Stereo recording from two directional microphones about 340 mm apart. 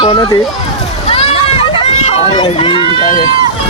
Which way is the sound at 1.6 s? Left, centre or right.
Centre.